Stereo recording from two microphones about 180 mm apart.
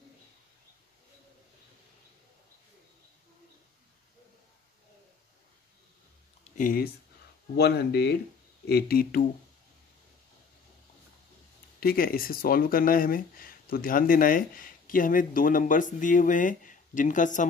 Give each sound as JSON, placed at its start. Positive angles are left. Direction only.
{"t": 6.4, "sound": "a sound", "side_deg": 45}
{"t": 7.5, "sound": "speech", "side_deg": 65}
{"t": 11.8, "sound": "speech", "side_deg": 55}